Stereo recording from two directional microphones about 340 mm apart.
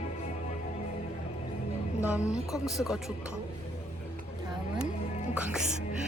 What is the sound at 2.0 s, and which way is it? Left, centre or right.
Speech, centre.